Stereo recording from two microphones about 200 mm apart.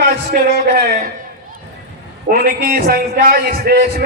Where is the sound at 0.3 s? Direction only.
50° right (ahead or behind).